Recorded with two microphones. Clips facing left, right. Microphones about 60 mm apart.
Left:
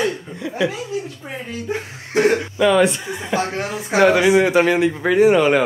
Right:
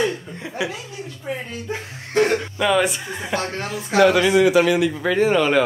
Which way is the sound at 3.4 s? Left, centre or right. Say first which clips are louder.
Left 3 dB; centre.